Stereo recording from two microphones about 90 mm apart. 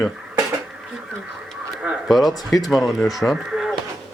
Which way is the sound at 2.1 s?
Centre (ahead or behind).